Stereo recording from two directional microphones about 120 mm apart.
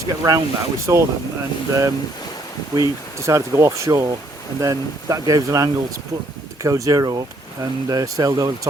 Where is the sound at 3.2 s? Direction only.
25° right (ahead or behind).